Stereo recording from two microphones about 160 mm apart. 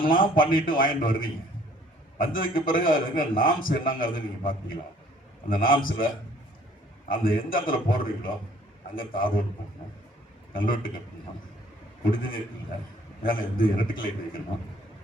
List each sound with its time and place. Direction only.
0.0 s a man's voice: 60° left (ahead or behind)
2.1 s a man's voice: 60° left (ahead or behind)
5.5 s a man's voice: 60° left (ahead or behind)
7.1 s a man's voice: 60° left (ahead or behind)
10.5 s a man's voice: 60° left (ahead or behind)
12.1 s a man's voice: 60° left (ahead or behind)